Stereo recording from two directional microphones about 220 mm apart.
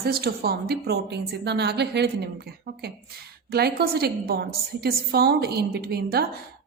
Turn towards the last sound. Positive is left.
turn(degrees=-45)  # may be behind; listen again after turning